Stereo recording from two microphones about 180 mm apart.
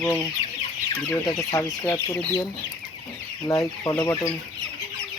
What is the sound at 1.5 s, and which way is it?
Speech, 15° left (ahead or behind).